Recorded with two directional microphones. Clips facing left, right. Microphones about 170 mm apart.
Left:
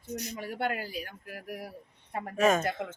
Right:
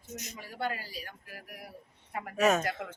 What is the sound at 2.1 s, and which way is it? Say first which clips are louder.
Speech: left 3 dB; 30° left (ahead or behind).